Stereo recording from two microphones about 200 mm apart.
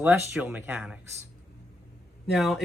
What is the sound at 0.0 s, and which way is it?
Speech, 10° right (ahead or behind).